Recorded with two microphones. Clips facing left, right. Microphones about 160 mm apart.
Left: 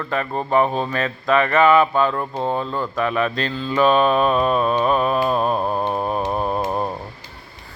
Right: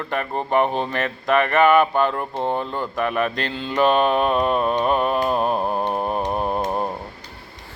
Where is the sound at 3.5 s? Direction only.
75° right (ahead or behind).